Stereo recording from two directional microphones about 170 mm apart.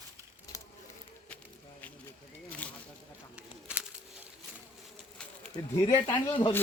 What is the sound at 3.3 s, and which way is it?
Bird, 5° right (ahead or behind).